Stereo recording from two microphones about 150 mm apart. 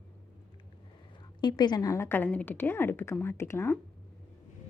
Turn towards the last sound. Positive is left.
turn(degrees=15)  # may be behind; listen again after turning